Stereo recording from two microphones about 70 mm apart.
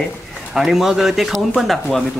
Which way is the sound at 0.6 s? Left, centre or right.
Centre.